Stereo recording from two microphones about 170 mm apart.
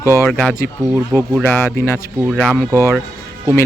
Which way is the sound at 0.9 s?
10° right (ahead or behind).